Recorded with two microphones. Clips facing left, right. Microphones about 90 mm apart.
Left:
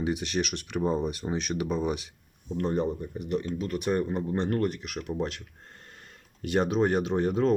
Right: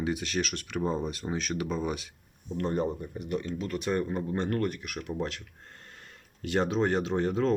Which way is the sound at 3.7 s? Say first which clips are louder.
Left 2 dB; 15° left (ahead or behind).